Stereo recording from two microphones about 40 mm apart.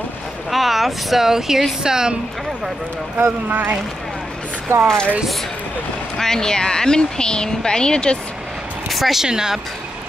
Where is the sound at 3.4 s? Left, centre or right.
Right.